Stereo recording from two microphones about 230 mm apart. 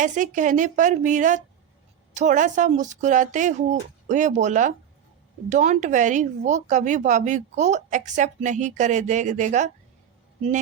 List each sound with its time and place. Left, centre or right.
0.0 s speech: right